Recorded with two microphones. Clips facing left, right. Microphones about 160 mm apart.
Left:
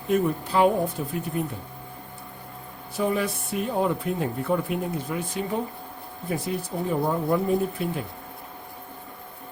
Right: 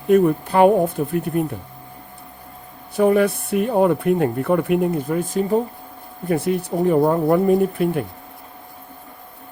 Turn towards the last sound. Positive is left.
turn(degrees=-60)  # may be behind; listen again after turning